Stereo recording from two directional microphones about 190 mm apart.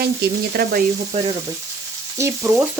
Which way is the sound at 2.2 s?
10° right (ahead or behind).